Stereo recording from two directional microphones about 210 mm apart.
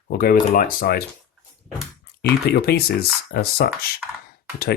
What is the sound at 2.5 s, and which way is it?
Speech, 50° left (ahead or behind).